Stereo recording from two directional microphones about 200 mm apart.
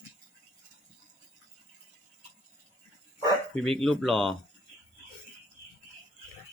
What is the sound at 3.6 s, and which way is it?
Speech, centre (ahead or behind).